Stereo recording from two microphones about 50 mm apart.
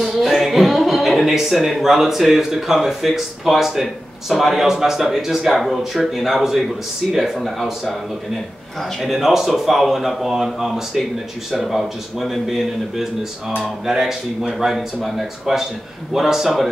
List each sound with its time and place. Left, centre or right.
0.0 s speech: centre
9.0 s speech: centre